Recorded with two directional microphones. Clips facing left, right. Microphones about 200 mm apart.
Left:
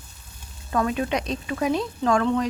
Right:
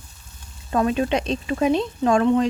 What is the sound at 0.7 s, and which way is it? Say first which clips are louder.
Speech: right 3 dB; 25° right (ahead or behind).